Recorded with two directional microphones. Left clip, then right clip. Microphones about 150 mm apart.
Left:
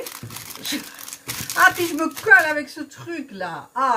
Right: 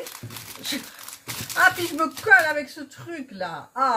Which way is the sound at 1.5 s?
Centre (ahead or behind).